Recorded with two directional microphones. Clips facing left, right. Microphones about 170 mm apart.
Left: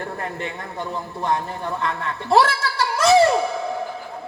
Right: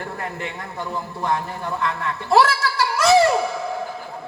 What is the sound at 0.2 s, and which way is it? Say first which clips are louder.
A man's voice: left 1 dB; 30° left (ahead or behind).